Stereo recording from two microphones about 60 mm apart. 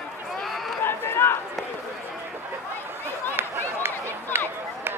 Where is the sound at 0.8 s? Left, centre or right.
Left.